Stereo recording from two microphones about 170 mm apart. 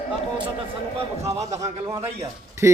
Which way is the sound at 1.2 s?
15° right (ahead or behind).